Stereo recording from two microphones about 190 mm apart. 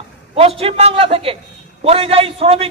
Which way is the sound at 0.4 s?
30° right (ahead or behind).